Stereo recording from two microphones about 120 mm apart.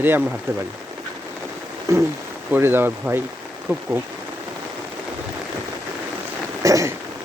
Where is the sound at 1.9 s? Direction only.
25° right (ahead or behind).